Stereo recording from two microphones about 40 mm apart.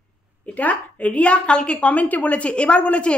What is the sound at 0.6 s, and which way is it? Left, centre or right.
A woman's voice, left.